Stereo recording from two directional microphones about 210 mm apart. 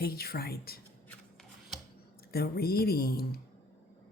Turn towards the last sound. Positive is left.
turn(degrees=45)  # may be behind; listen again after turning